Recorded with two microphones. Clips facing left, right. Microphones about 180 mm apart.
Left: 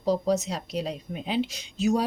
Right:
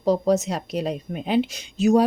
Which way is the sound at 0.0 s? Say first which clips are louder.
Right 5 dB; 55° right (ahead or behind).